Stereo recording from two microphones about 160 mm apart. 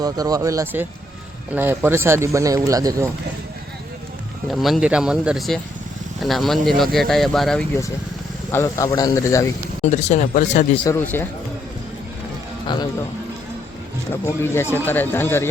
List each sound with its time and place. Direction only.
0.0 s speech: 25° right (ahead or behind)
4.5 s speech: centre (ahead or behind)
8.5 s a man's voice: 20° left (ahead or behind)
9.8 s speech: 45° left (ahead or behind)
10.8 s speech: 15° left (ahead or behind)
14.3 s speech: 15° left (ahead or behind)